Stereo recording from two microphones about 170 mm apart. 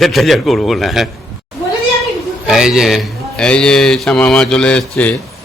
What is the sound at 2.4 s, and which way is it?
A man's voice, 5° right (ahead or behind).